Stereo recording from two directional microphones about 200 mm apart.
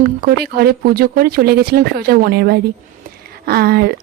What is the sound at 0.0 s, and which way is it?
Speech, 50° right (ahead or behind).